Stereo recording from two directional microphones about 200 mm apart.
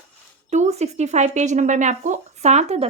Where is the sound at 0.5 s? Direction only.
35° right (ahead or behind).